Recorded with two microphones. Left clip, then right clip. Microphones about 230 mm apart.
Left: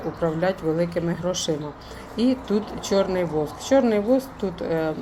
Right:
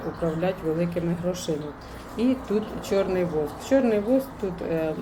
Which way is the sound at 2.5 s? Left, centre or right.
Left.